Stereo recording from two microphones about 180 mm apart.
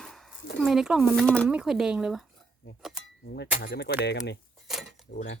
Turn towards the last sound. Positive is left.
turn(degrees=70)  # may be behind; listen again after turning